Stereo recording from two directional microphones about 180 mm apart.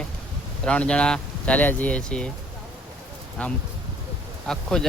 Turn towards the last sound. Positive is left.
turn(degrees=5)  # may be behind; listen again after turning